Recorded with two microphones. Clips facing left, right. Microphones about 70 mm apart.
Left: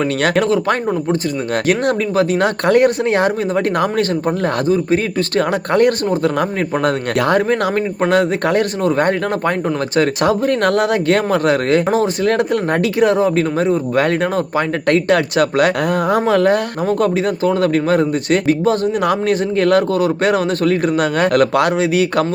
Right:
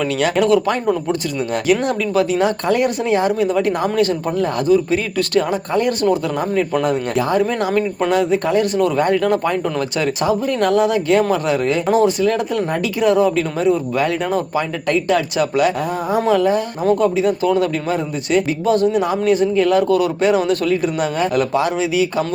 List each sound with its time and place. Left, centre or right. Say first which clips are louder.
0.0 s speech: left 2 dB; left
1.6 s speech: left 1 dB; left
4.7 s speech: right 2 dB; left
5.5 s speech: left 4 dB; left
11.9 s speech: right 1 dB; left
19.0 s speech: even; left
19.9 s speech: even; left
20.5 s speech: left 2 dB; left